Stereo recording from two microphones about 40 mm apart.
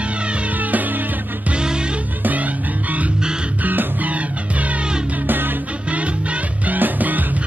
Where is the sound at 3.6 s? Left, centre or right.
Right.